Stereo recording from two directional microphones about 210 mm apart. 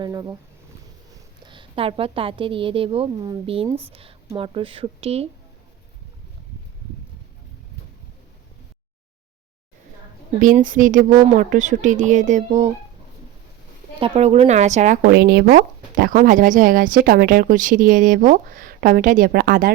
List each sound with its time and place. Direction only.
0.0 s a woman's voice: 15° right (ahead or behind)
10.4 s speech: 40° right (ahead or behind)
14.0 s speech: 30° right (ahead or behind)
15.1 s speech: 50° right (ahead or behind)